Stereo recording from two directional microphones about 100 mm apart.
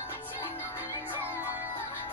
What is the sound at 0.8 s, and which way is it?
Music, 20° right (ahead or behind).